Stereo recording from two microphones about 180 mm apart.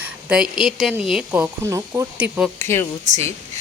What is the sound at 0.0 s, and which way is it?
Speech, 5° right (ahead or behind).